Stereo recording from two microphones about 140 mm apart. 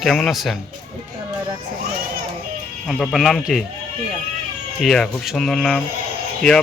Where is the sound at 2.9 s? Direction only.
Centre (ahead or behind).